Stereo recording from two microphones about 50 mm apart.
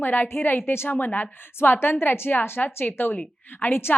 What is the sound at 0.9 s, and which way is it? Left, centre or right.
Speech, left.